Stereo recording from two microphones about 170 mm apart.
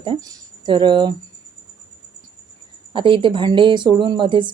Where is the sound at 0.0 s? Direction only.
25° right (ahead or behind).